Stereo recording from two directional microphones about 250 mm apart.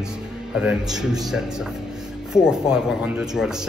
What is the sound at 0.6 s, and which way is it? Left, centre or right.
Speech, centre.